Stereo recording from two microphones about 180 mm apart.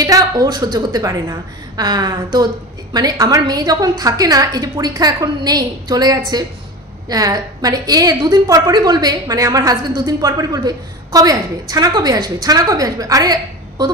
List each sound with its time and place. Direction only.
0.0 s a woman's voice: 20° right (ahead or behind)